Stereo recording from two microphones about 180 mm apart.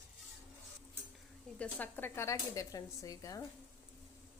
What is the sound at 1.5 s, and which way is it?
A woman's voice, 10° left (ahead or behind).